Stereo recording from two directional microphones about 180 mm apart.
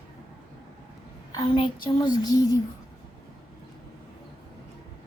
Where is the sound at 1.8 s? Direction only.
25° left (ahead or behind).